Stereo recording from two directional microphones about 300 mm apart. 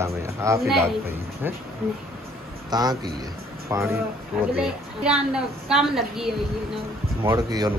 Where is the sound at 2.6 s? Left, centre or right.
Centre.